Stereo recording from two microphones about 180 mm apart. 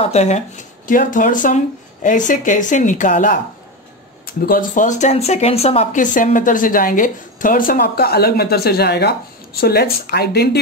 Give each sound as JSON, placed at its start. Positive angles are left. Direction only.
{"t": 0.0, "sound": "speech", "side_deg": 35}
{"t": 0.8, "sound": "speech", "side_deg": 50}